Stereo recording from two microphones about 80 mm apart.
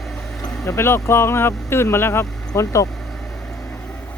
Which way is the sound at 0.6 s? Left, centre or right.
Left.